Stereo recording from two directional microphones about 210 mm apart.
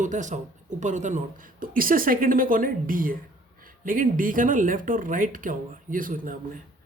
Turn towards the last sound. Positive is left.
turn(degrees=-40)  # may be behind; listen again after turning